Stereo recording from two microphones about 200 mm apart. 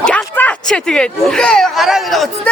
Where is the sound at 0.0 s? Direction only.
5° left (ahead or behind).